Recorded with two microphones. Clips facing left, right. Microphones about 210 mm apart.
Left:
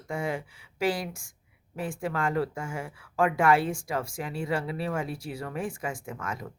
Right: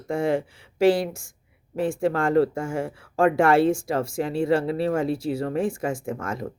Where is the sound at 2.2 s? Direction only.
30° right (ahead or behind).